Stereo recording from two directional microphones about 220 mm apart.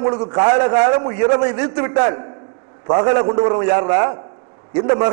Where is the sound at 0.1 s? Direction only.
25° right (ahead or behind).